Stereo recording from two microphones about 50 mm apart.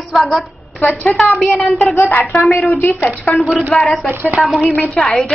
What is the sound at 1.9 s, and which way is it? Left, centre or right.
A woman's voice, left.